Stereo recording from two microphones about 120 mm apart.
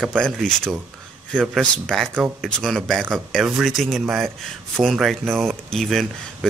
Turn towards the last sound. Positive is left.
turn(degrees=0)  # may be behind; listen again after turning